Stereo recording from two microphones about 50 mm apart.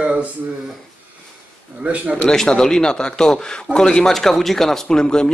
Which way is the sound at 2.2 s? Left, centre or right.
Centre.